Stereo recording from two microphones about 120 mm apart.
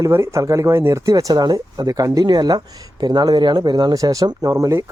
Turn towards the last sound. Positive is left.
turn(degrees=-25)  # may be behind; listen again after turning